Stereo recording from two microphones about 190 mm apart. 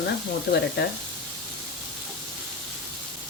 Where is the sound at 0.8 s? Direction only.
65° left (ahead or behind).